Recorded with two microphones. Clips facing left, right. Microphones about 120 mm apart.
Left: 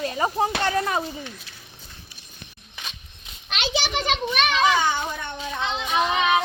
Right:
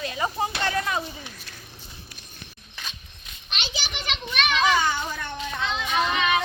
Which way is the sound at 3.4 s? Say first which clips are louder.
Left 8 dB; 75° left (ahead or behind).